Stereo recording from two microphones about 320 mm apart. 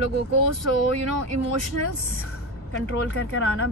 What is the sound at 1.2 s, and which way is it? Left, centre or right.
Speech, right.